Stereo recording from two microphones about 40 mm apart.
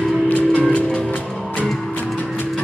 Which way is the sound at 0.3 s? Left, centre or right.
Left.